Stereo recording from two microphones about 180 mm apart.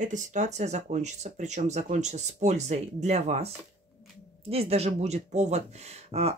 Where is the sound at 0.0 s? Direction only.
45° right (ahead or behind).